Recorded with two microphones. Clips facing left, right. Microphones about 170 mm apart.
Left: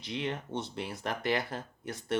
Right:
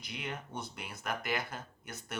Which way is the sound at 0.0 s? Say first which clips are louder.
Left 7 dB; 25° left (ahead or behind).